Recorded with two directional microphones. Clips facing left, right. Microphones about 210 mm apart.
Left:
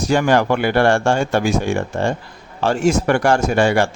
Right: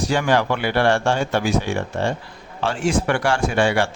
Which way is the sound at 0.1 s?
45° left (ahead or behind).